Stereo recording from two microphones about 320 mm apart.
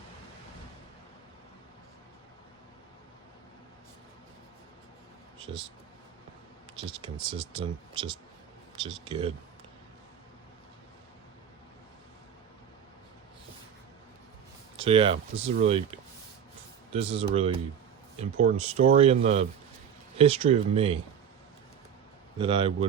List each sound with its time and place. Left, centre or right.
6.7 s speech: centre
14.8 s speech: centre
22.4 s speech: centre